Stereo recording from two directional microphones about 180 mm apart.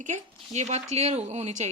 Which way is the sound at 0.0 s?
40° right (ahead or behind).